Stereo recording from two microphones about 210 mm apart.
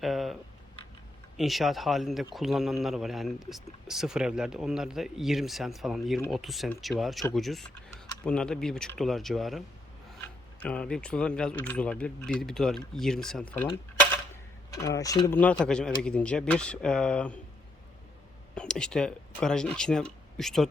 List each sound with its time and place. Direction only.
0.0 s a sound: centre (ahead or behind)
1.4 s speech: centre (ahead or behind)
14.8 s speech: 15° left (ahead or behind)
15.4 s speech: 5° left (ahead or behind)
18.5 s speech: 5° left (ahead or behind)